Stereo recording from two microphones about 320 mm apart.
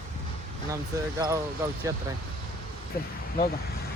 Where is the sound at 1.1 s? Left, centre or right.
Centre.